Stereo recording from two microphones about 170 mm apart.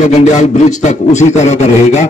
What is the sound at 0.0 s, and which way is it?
A man's voice, 45° left (ahead or behind).